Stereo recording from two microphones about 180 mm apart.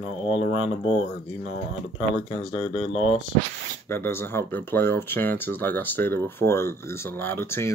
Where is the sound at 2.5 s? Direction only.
30° left (ahead or behind).